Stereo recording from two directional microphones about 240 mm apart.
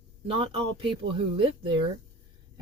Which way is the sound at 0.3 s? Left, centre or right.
Right.